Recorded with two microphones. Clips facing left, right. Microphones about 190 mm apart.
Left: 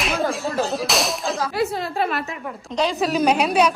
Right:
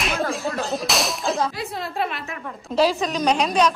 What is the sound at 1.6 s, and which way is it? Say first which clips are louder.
A woman's voice: left 3 dB; centre (ahead or behind).